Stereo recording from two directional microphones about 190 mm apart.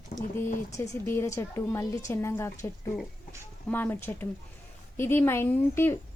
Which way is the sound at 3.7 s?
10° left (ahead or behind).